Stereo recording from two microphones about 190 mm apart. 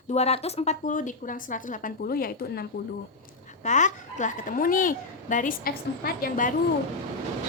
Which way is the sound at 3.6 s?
40° left (ahead or behind).